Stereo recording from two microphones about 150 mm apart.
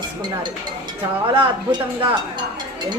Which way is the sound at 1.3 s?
35° right (ahead or behind).